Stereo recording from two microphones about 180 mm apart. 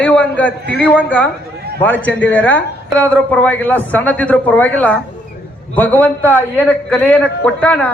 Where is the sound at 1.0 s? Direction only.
10° left (ahead or behind).